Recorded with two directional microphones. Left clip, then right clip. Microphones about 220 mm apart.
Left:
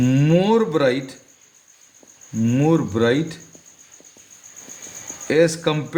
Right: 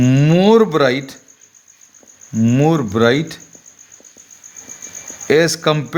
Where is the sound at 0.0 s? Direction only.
40° right (ahead or behind).